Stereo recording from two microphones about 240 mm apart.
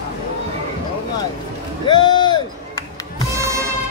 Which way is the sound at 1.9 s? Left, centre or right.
Centre.